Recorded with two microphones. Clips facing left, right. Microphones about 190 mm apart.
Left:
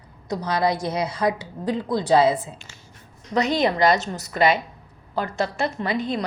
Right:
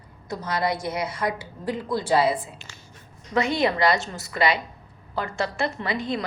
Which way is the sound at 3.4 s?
40° left (ahead or behind).